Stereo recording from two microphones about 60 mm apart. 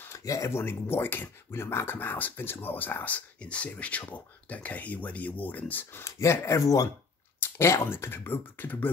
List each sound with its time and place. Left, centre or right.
0.1 s speech: left
6.0 s speech: left
7.4 s speech: left